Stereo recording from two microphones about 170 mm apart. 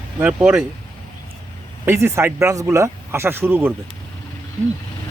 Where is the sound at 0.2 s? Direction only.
10° right (ahead or behind).